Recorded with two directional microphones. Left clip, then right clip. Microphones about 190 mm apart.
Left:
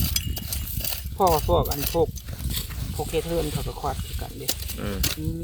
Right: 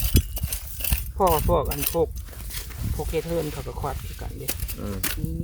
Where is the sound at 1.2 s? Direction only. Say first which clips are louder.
Even; 10° right (ahead or behind).